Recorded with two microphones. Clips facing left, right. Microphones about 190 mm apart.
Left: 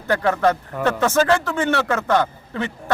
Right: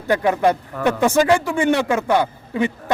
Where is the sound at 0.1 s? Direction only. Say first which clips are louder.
Right 1 dB; 15° right (ahead or behind).